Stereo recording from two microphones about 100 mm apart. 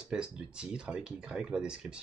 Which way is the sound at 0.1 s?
10° right (ahead or behind).